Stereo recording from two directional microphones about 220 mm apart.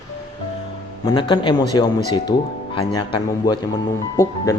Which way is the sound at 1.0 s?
20° left (ahead or behind).